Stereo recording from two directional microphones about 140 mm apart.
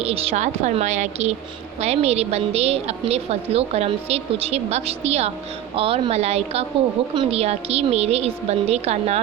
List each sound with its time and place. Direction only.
0.0 s a woman's voice: 45° right (ahead or behind)